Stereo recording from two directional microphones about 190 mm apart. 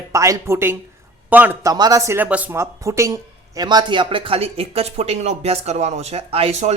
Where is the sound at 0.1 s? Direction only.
15° right (ahead or behind).